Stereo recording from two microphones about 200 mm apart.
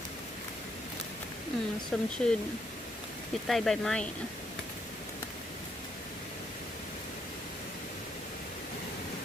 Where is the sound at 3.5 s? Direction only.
Centre (ahead or behind).